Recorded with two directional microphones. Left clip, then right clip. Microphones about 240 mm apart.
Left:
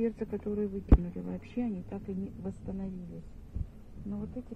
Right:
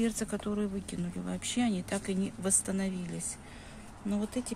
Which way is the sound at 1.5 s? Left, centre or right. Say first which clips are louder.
Right 5 dB; right.